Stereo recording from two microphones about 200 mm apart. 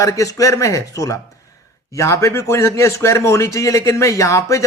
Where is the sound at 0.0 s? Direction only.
15° left (ahead or behind).